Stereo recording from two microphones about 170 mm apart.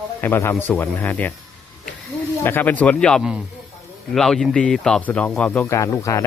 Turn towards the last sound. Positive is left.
turn(degrees=15)  # may be behind; listen again after turning